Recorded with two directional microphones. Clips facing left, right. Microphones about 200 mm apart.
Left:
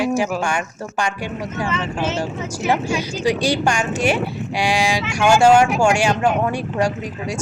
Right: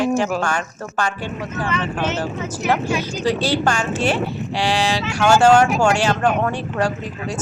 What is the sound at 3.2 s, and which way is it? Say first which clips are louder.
Speech: left 1 dB; 15° left (ahead or behind).